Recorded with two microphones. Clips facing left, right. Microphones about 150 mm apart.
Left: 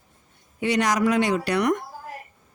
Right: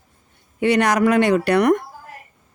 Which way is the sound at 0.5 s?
60° right (ahead or behind).